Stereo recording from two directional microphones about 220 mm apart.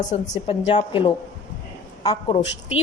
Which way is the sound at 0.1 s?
30° left (ahead or behind).